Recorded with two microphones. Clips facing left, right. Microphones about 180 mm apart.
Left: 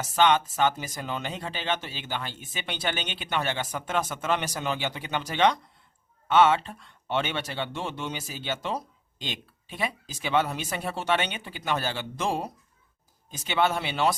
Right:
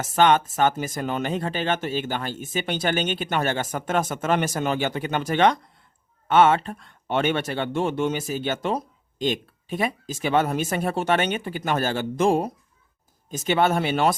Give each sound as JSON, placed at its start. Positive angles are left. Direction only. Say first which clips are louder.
{"t": 0.0, "sound": "speech", "louder": "right 4 dB", "side_deg": -50}